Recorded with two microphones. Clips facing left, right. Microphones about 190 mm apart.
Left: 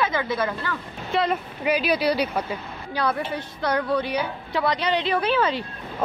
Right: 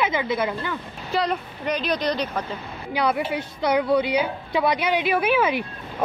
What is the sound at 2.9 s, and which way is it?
A woman's voice, 15° right (ahead or behind).